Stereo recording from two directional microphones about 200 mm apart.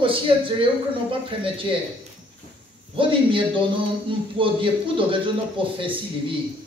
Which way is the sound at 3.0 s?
25° right (ahead or behind).